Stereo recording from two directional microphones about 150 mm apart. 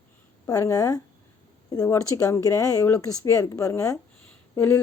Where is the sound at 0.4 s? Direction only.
25° left (ahead or behind).